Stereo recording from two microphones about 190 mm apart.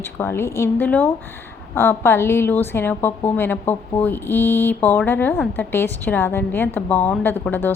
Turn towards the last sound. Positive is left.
turn(degrees=10)  # may be behind; listen again after turning